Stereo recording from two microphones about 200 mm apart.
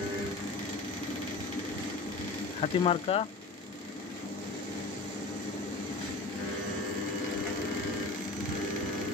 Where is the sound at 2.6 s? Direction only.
30° left (ahead or behind).